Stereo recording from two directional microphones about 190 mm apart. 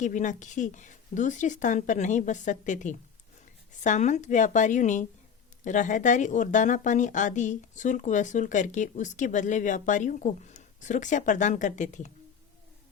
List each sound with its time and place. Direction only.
0.0 s speech: 40° left (ahead or behind)